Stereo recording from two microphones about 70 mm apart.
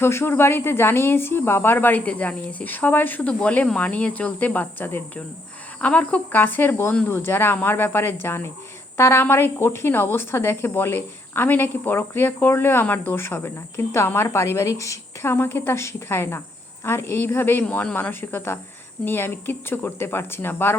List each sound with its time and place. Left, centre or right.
0.0 s a woman's voice: left
15.3 s a woman's voice: left